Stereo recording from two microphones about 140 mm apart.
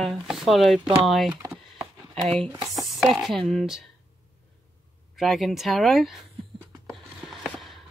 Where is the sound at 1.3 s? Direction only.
25° right (ahead or behind).